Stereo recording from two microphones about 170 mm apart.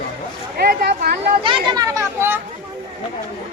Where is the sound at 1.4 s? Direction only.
30° right (ahead or behind).